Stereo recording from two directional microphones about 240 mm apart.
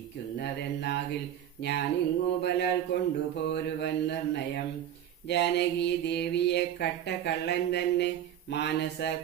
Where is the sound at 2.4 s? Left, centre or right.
Left.